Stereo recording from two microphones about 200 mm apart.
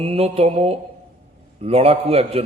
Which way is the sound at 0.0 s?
30° right (ahead or behind).